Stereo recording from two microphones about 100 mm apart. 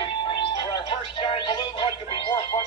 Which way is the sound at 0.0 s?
50° left (ahead or behind).